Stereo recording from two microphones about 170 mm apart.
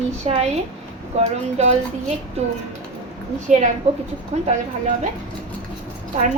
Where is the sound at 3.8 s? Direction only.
40° right (ahead or behind).